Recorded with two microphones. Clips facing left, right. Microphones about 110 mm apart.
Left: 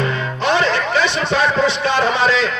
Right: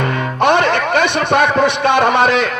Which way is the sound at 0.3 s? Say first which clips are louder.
Right 5 dB; 55° right (ahead or behind).